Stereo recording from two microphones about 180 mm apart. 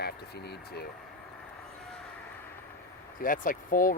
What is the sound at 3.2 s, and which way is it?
Speech, 50° left (ahead or behind).